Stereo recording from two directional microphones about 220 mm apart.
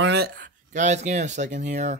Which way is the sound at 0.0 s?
45° right (ahead or behind).